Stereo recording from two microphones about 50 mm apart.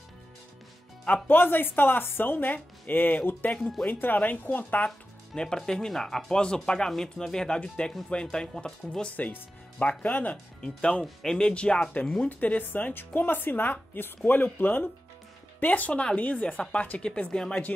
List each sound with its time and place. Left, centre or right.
1.2 s speech: left
3.5 s speech: centre
3.8 s speech: left
5.3 s speech: centre
6.4 s speech: centre
9.1 s speech: left
10.3 s speech: centre
17.3 s speech: centre